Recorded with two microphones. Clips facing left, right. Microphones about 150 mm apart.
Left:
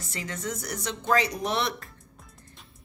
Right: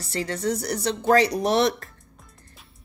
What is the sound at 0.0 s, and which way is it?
Speech, 35° right (ahead or behind).